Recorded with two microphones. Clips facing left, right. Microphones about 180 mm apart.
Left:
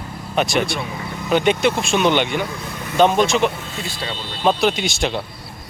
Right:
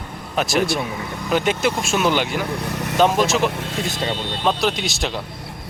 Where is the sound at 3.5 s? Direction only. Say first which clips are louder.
Right 4 dB; 75° right (ahead or behind).